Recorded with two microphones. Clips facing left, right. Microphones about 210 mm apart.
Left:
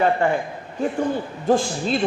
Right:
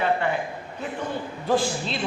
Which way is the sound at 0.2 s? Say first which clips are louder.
Left 5 dB; 50° left (ahead or behind).